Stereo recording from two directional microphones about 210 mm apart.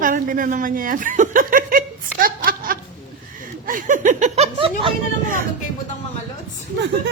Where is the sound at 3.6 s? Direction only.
40° right (ahead or behind).